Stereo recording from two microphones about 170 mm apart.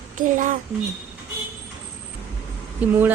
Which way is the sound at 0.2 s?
50° right (ahead or behind).